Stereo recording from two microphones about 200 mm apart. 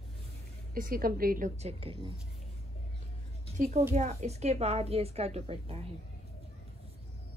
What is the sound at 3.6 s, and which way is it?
A woman's voice, 35° right (ahead or behind).